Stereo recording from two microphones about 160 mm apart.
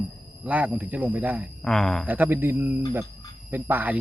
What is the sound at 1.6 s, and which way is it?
Speech, 5° left (ahead or behind).